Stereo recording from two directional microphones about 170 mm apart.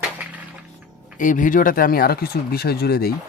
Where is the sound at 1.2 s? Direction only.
50° left (ahead or behind).